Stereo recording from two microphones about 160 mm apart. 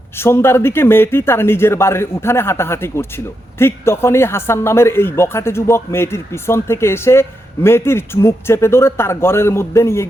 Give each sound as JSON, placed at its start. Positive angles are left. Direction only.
{"t": 0.2, "sound": "speech", "side_deg": 15}